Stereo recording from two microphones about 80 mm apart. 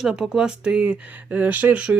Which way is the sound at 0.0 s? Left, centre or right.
Centre.